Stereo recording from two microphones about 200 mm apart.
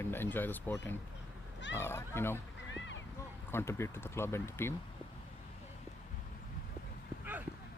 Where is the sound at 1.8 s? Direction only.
10° left (ahead or behind).